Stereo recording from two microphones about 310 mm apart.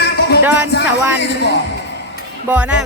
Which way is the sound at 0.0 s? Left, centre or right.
Left.